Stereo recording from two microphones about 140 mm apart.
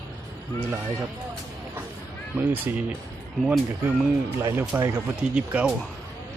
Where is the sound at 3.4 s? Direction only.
Centre (ahead or behind).